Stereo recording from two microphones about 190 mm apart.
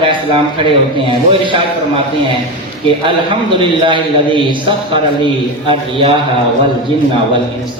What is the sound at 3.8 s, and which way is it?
A man's voice, 25° right (ahead or behind).